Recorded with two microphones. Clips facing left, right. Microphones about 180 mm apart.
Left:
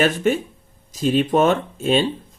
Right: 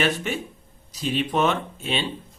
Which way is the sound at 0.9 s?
45° left (ahead or behind).